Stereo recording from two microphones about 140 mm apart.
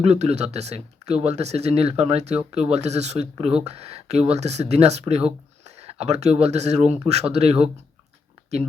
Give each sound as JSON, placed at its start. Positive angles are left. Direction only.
{"t": 0.0, "sound": "speech", "side_deg": -50}